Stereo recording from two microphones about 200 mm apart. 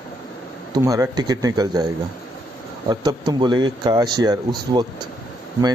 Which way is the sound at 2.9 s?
20° right (ahead or behind).